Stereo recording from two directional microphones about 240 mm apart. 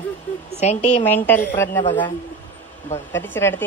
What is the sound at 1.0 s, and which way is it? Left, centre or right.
Speech, centre.